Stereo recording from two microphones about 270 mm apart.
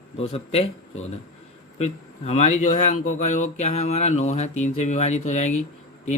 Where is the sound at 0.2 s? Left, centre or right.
Left.